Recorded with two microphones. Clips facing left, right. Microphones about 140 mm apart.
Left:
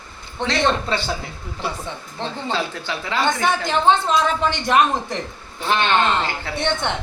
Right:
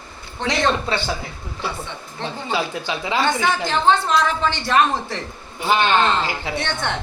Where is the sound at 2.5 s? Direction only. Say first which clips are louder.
Right 4 dB; 15° right (ahead or behind).